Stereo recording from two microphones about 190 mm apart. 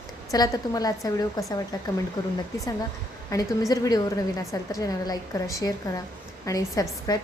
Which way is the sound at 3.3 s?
20° left (ahead or behind).